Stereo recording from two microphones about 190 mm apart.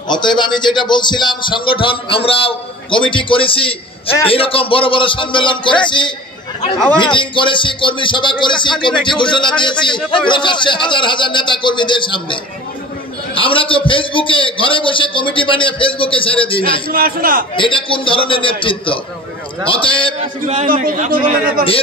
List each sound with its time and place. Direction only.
0.1 s a man's voice: 25° left (ahead or behind)
16.9 s a man's voice: 50° right (ahead or behind)
17.6 s a man's voice: 25° left (ahead or behind)
20.2 s a man's voice: 35° right (ahead or behind)